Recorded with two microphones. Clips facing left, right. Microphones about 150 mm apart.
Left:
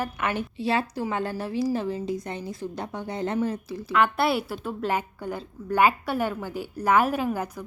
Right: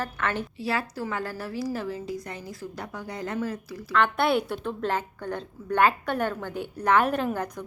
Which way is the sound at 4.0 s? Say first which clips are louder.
Even; 5° left (ahead or behind).